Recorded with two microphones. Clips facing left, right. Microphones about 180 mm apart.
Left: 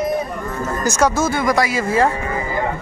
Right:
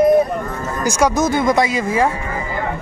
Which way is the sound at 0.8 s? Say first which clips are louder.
Right 2 dB; 10° right (ahead or behind).